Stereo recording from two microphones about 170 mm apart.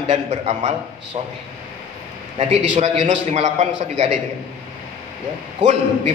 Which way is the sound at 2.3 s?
40° right (ahead or behind).